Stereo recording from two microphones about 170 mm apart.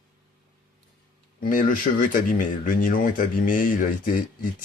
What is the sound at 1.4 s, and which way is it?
Speech, 55° left (ahead or behind).